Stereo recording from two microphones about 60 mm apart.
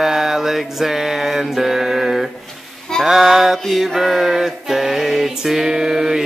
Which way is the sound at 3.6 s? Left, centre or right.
Centre.